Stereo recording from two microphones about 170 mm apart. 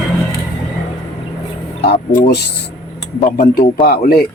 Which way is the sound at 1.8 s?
70° left (ahead or behind).